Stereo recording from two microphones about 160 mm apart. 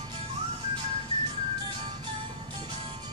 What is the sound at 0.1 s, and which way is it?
Music, 35° right (ahead or behind).